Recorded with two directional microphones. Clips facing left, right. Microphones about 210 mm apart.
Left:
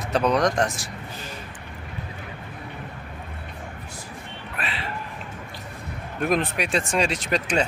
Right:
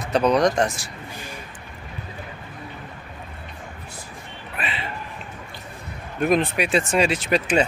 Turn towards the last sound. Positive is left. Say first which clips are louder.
# right 3 dB
turn(degrees=-5)  # may be behind; listen again after turning